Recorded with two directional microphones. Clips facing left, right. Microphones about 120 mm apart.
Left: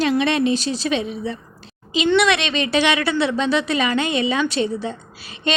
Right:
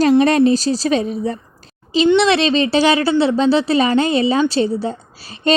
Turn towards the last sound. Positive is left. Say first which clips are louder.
# right 4 dB
turn(degrees=-35)  # may be behind; listen again after turning